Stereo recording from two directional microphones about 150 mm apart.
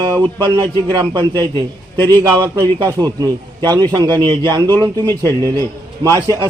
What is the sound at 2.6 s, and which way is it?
A man's voice, 25° right (ahead or behind).